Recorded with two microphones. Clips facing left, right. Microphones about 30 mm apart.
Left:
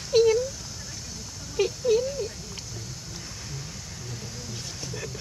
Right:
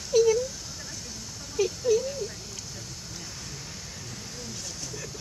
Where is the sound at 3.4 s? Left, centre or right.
Centre.